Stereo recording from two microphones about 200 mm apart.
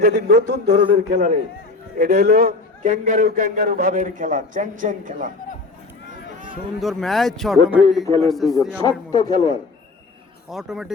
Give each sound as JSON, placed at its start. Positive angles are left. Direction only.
{"t": 0.0, "sound": "a man's voice", "side_deg": -55}
{"t": 2.3, "sound": "a man's voice", "side_deg": -45}
{"t": 6.7, "sound": "speech", "side_deg": 0}
{"t": 8.8, "sound": "speech", "side_deg": 20}
{"t": 10.5, "sound": "speech", "side_deg": 0}